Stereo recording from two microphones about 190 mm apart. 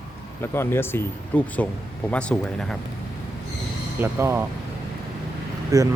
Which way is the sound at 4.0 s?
10° right (ahead or behind).